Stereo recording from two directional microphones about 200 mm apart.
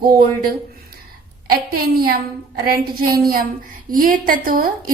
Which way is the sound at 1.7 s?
45° right (ahead or behind).